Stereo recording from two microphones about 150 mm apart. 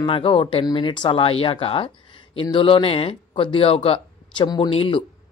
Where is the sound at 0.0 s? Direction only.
35° left (ahead or behind).